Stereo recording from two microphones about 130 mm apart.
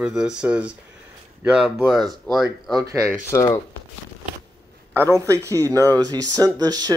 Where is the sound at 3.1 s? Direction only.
25° left (ahead or behind).